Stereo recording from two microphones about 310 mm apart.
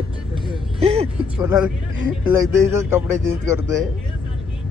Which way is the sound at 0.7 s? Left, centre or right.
Centre.